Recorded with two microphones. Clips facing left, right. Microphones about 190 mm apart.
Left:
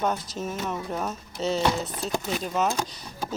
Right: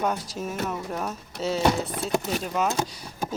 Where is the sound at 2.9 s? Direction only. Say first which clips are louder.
Right 2 dB; 10° right (ahead or behind).